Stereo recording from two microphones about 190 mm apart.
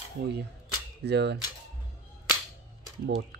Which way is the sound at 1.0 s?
65° right (ahead or behind).